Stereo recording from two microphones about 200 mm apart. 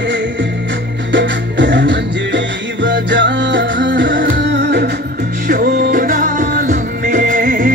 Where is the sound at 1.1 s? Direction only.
65° right (ahead or behind).